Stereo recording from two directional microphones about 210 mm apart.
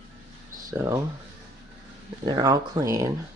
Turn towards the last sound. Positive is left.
turn(degrees=-15)  # may be behind; listen again after turning